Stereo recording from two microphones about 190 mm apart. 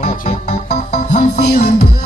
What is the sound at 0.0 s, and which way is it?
Music, 40° left (ahead or behind).